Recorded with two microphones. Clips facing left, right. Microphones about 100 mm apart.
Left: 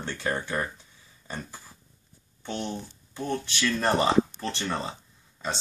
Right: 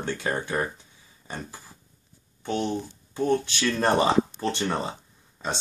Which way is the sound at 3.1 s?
20° right (ahead or behind).